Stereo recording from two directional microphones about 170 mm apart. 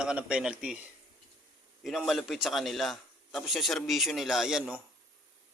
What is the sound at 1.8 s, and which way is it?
A man's voice, centre (ahead or behind).